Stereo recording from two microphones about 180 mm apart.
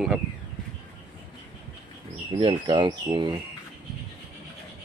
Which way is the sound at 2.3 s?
25° right (ahead or behind).